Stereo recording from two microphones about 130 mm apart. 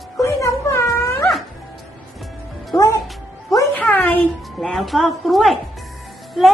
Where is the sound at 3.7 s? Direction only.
10° left (ahead or behind).